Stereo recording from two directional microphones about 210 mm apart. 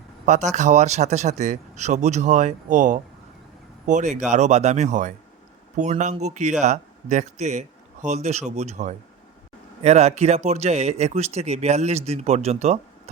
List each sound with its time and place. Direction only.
0.3 s speech: 35° right (ahead or behind)